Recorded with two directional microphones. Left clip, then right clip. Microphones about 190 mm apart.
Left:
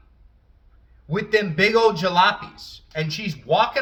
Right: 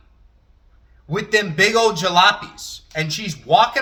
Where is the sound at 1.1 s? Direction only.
20° right (ahead or behind).